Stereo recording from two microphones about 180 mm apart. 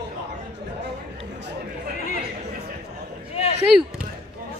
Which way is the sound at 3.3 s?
35° left (ahead or behind).